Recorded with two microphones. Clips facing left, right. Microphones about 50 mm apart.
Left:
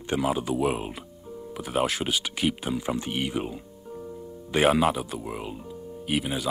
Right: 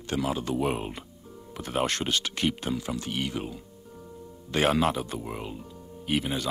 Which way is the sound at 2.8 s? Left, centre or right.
Left.